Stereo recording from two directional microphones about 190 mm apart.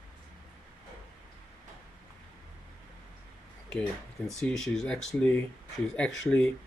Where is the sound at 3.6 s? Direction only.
5° left (ahead or behind).